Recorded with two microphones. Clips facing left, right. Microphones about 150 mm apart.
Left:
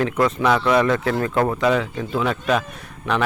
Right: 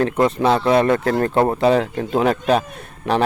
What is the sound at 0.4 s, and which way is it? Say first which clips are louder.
Speech: right 2 dB; 30° right (ahead or behind).